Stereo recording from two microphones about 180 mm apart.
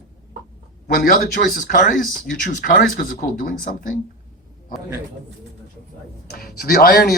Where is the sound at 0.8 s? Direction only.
50° left (ahead or behind).